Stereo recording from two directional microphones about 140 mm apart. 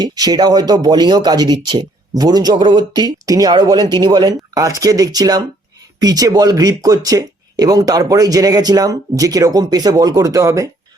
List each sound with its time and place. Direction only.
0.0 s speech: 30° right (ahead or behind)